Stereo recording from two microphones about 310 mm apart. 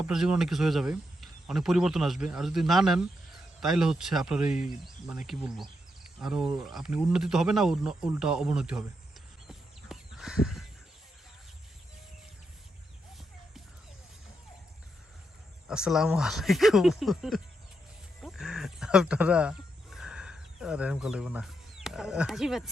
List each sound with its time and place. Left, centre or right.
0.0 s speech: centre
9.5 s a sound: centre
15.6 s speech: centre